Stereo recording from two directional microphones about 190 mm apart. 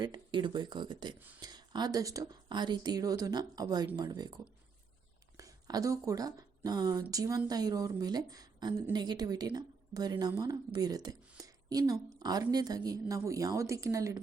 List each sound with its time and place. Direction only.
0.0 s speech: 25° right (ahead or behind)
5.4 s speech: 20° right (ahead or behind)